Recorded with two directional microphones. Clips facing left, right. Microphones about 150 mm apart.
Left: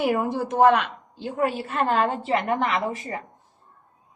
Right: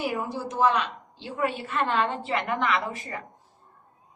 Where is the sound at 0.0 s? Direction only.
55° left (ahead or behind); by 3.2 s 35° left (ahead or behind).